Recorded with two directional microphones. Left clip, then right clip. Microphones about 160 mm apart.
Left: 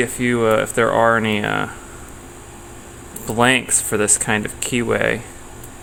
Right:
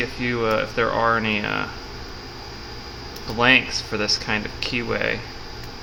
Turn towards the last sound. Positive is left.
turn(degrees=65)  # may be behind; listen again after turning